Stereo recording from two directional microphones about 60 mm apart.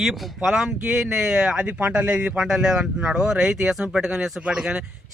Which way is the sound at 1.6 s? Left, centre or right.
Right.